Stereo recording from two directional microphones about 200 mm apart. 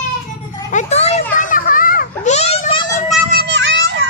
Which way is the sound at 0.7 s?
35° left (ahead or behind).